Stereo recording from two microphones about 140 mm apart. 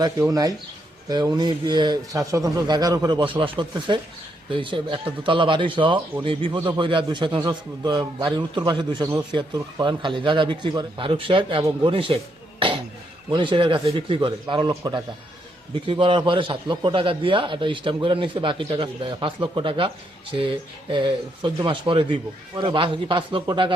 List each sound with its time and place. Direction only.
0.0 s a man's voice: 25° right (ahead or behind)
15.7 s a man's voice: 40° right (ahead or behind)